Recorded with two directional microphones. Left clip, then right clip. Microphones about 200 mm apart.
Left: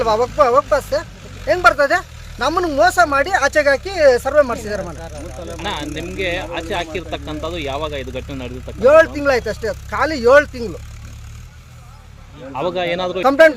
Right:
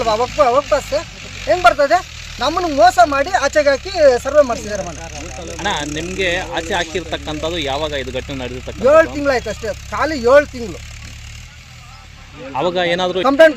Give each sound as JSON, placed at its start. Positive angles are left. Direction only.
{"t": 0.0, "sound": "speech", "side_deg": 0}
{"t": 5.6, "sound": "speech", "side_deg": -40}
{"t": 8.8, "sound": "speech", "side_deg": 0}
{"t": 12.5, "sound": "speech", "side_deg": -40}
{"t": 13.2, "sound": "speech", "side_deg": 5}